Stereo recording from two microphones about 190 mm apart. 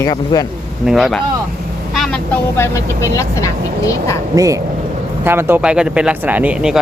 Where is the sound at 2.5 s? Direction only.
15° left (ahead or behind).